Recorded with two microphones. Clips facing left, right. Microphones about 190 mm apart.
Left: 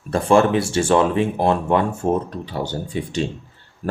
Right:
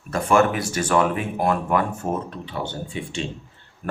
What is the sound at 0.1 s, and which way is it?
Speech, 30° left (ahead or behind).